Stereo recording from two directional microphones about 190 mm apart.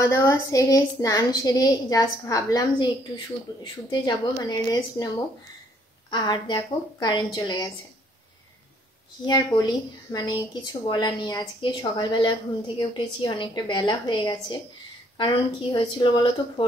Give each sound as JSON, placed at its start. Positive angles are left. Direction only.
{"t": 0.0, "sound": "speech", "side_deg": 15}
{"t": 4.0, "sound": "speech", "side_deg": 20}
{"t": 6.0, "sound": "speech", "side_deg": 25}
{"t": 9.2, "sound": "speech", "side_deg": 25}